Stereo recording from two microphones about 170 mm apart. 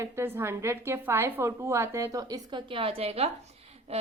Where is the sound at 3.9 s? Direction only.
40° right (ahead or behind).